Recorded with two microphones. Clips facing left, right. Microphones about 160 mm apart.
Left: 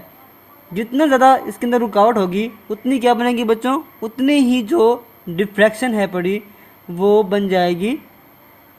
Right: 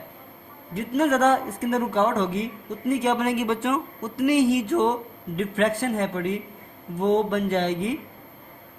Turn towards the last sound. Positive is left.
turn(degrees=75)  # may be behind; listen again after turning